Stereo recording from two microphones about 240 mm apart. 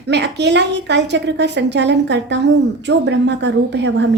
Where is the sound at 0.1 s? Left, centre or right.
Right.